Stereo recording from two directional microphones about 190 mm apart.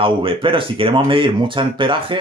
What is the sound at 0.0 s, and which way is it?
Speech, 30° right (ahead or behind).